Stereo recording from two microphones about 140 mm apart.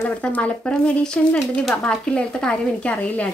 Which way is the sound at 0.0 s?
10° left (ahead or behind).